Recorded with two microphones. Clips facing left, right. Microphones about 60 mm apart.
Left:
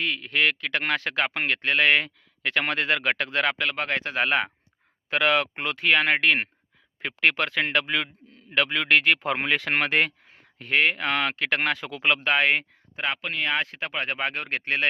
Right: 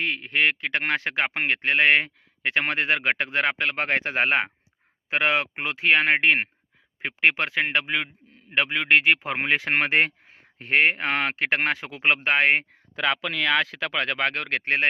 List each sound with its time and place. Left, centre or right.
0.0 s a man's voice: right; by 9.4 s centre
9.4 s speech: right
13.1 s speech: right